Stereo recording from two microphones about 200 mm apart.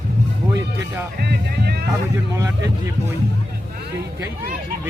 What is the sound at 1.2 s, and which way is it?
Speech, 55° right (ahead or behind).